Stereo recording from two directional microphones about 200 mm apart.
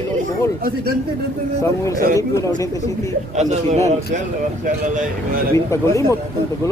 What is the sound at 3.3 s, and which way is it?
Speech, 35° right (ahead or behind).